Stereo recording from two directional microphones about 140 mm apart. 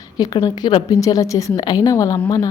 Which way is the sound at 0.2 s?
30° left (ahead or behind).